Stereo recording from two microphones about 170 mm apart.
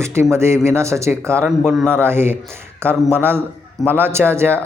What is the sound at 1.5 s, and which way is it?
Speech, centre (ahead or behind).